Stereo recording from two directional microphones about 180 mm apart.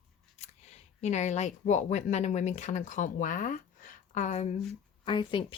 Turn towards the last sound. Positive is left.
turn(degrees=25)  # may be behind; listen again after turning